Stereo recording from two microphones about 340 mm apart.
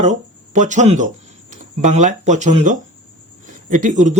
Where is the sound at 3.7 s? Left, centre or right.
Right.